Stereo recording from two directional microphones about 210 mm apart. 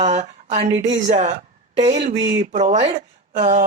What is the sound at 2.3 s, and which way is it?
Speech, 35° right (ahead or behind).